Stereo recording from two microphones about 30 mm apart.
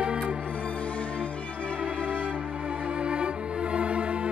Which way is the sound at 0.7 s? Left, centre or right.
Left.